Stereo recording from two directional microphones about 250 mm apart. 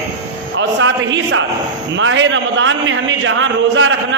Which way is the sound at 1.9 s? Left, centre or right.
Right.